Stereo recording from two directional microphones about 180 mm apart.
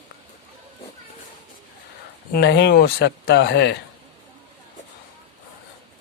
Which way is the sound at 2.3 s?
70° left (ahead or behind).